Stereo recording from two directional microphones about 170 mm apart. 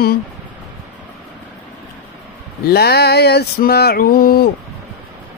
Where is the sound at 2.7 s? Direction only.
70° left (ahead or behind).